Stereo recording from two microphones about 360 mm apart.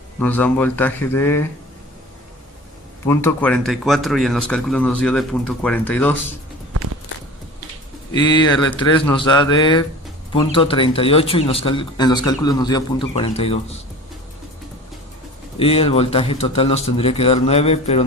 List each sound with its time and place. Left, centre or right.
0.2 s speech: centre
3.1 s speech: centre
8.1 s speech: centre
15.5 s speech: centre